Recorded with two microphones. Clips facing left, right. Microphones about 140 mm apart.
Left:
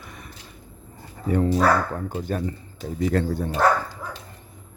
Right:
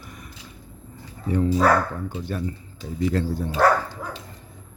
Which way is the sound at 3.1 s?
60° left (ahead or behind).